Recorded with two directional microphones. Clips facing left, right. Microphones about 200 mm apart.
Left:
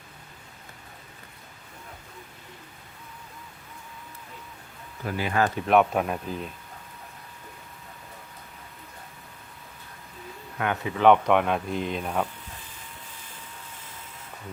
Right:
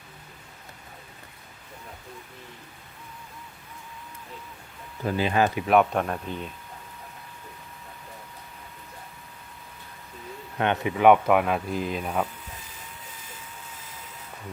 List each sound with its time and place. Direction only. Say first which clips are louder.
5.0 s speech: right 2 dB; 25° right (ahead or behind)
5.5 s speech: even; centre (ahead or behind)
10.6 s speech: right 3 dB; 25° right (ahead or behind)
10.9 s speech: even; 10° right (ahead or behind)